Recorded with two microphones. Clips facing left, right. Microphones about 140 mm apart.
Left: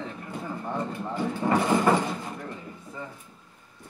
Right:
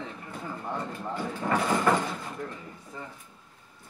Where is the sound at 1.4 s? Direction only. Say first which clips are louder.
Left 3 dB; 15° left (ahead or behind).